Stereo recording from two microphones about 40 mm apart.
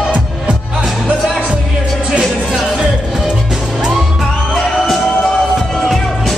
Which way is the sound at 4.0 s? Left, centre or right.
Centre.